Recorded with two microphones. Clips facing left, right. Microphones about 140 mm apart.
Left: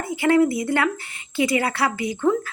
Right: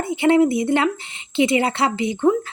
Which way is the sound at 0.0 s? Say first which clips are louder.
Right 2 dB; 25° right (ahead or behind).